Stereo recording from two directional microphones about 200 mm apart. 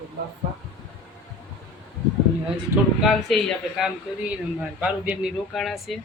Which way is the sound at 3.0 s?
Centre (ahead or behind).